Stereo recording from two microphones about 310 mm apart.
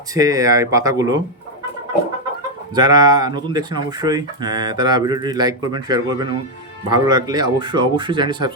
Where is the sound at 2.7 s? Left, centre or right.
Centre.